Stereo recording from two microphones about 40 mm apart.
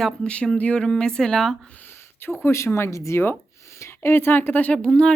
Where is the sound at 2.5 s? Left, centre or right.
Left.